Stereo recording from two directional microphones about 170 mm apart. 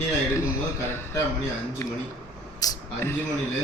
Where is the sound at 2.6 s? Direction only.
15° left (ahead or behind).